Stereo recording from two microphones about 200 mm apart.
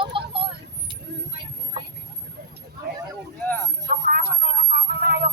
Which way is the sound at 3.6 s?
50° right (ahead or behind).